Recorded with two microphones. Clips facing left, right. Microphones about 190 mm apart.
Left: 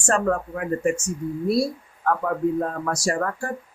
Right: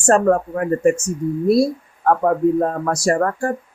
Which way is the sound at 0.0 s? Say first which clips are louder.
Right 7 dB; 40° right (ahead or behind).